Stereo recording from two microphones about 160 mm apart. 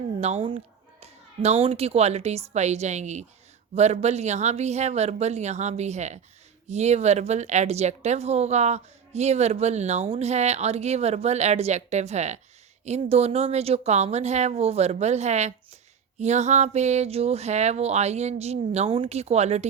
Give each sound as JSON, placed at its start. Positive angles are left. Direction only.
{"t": 0.2, "sound": "a woman's voice", "side_deg": -40}